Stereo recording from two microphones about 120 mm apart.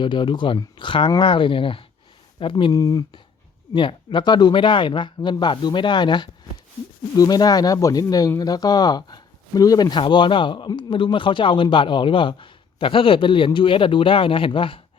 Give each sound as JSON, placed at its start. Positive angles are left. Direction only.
{"t": 0.0, "sound": "speech", "side_deg": 40}
{"t": 2.7, "sound": "speech", "side_deg": 30}
{"t": 3.8, "sound": "speech", "side_deg": 40}